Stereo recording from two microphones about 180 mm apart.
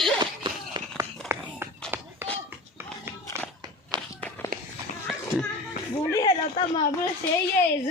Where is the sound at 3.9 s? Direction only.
25° right (ahead or behind).